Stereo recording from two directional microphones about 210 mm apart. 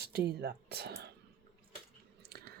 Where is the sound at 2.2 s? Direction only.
50° right (ahead or behind).